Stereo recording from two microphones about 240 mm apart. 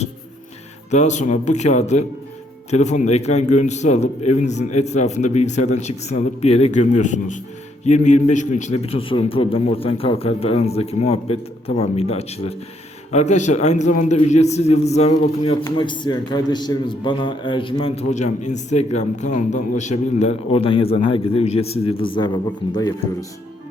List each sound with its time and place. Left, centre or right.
0.9 s a man's voice: left